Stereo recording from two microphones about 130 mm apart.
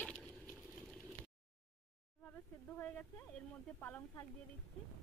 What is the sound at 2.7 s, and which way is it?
A woman's voice, 15° left (ahead or behind).